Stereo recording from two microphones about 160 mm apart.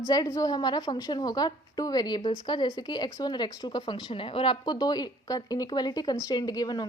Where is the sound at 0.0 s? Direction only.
20° left (ahead or behind).